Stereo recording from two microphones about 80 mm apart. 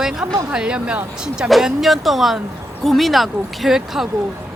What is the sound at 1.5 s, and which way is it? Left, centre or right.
Speech, centre.